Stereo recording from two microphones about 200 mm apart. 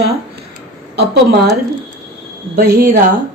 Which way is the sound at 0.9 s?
55° right (ahead or behind).